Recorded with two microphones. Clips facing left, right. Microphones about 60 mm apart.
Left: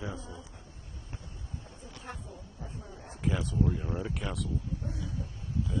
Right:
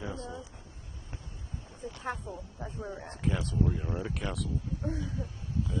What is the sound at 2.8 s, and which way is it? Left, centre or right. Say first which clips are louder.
Speech: right 7 dB; right.